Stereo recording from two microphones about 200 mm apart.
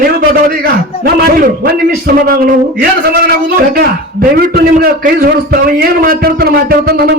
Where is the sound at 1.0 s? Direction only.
50° right (ahead or behind).